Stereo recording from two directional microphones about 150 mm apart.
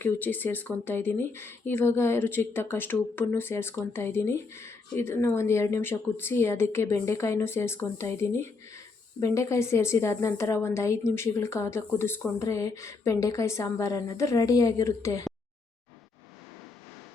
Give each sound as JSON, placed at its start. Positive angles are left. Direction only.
{"t": 0.0, "sound": "a woman's voice", "side_deg": 15}